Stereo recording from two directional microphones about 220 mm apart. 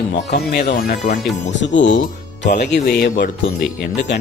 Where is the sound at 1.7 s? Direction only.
55° left (ahead or behind).